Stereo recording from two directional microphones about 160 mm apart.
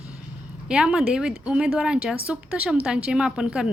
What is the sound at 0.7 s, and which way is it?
A woman's voice, 5° right (ahead or behind).